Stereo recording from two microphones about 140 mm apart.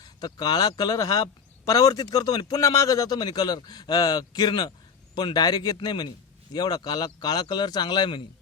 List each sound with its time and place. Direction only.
0.2 s a man's voice: 30° left (ahead or behind)